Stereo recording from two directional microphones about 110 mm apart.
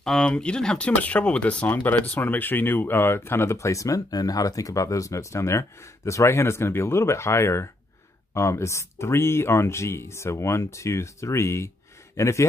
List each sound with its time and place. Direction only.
0.0 s speech: 5° left (ahead or behind); by 12.4 s 25° left (ahead or behind)